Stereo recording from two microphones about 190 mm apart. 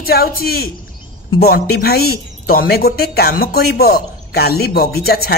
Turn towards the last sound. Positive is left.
turn(degrees=55)  # may be behind; listen again after turning